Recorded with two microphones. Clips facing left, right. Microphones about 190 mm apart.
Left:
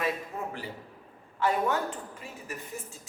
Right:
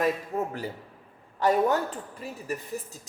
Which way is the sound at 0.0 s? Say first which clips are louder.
Right 5 dB; 40° right (ahead or behind).